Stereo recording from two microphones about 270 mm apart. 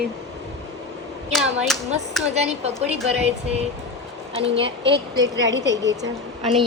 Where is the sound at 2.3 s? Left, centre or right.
Right.